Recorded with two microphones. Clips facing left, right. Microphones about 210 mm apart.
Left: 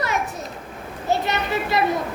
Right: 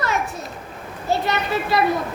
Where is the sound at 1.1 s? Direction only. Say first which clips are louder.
Right 1 dB; 20° left (ahead or behind).